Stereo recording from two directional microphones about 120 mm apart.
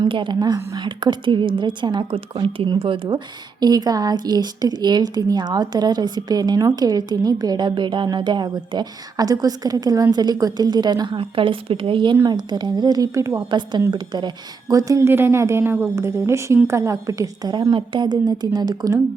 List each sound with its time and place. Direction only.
0.0 s a woman's voice: 40° right (ahead or behind)
3.6 s a woman's voice: 35° right (ahead or behind)
13.5 s a woman's voice: 40° right (ahead or behind)